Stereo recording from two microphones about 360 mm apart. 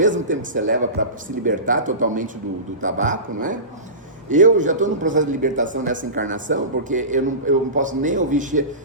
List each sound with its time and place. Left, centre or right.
0.0 s a man's voice: right